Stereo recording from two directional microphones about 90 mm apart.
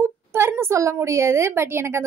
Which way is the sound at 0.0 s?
25° right (ahead or behind).